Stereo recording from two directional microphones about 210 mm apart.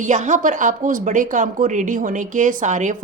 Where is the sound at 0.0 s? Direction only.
35° right (ahead or behind).